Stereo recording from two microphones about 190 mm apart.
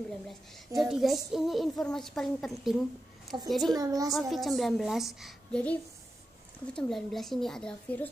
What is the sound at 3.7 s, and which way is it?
Speech, 20° right (ahead or behind).